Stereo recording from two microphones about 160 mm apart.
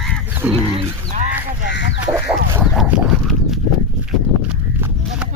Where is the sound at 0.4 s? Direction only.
10° right (ahead or behind).